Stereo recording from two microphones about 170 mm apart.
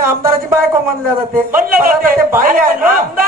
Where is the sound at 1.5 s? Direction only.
55° right (ahead or behind).